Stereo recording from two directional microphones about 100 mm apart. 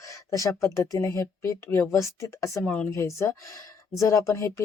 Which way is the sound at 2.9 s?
30° left (ahead or behind).